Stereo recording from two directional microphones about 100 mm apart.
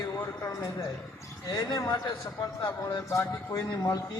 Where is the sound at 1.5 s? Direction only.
45° left (ahead or behind).